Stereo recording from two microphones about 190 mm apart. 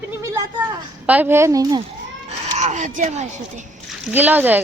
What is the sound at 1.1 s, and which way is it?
Speech, 10° right (ahead or behind).